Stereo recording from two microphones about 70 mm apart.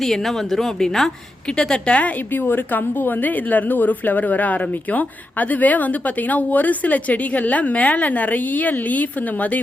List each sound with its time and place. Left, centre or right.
0.0 s a woman's voice: centre; by 9.6 s left